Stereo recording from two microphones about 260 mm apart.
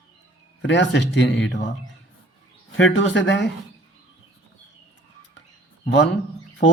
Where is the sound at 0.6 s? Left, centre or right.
Left.